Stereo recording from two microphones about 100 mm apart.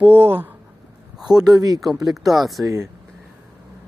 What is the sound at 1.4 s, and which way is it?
Speech, 40° right (ahead or behind).